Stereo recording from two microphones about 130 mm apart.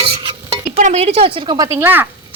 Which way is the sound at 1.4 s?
35° right (ahead or behind).